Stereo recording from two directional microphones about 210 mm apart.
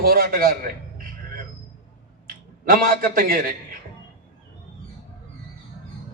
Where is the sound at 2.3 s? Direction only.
45° right (ahead or behind).